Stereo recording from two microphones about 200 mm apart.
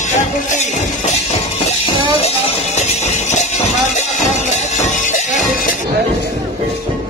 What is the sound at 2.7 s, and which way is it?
Music, 35° left (ahead or behind).